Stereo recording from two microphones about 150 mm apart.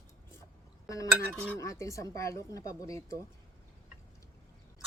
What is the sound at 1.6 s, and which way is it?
Speech, 20° left (ahead or behind).